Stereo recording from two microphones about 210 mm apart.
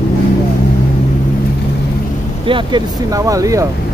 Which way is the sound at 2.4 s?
20° right (ahead or behind).